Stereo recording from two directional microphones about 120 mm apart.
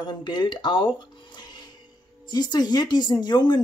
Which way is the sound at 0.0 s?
40° left (ahead or behind).